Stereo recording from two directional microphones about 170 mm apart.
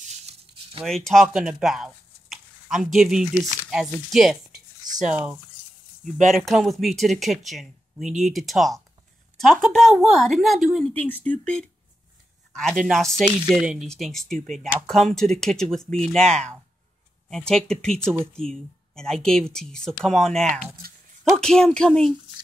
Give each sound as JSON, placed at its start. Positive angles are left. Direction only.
{"t": 0.0, "sound": "a sound", "side_deg": -35}
{"t": 0.8, "sound": "speech", "side_deg": 0}
{"t": 6.3, "sound": "speech", "side_deg": 0}
{"t": 12.8, "sound": "speech", "side_deg": 0}